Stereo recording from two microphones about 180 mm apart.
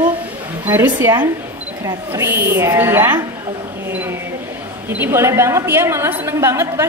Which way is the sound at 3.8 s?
15° right (ahead or behind).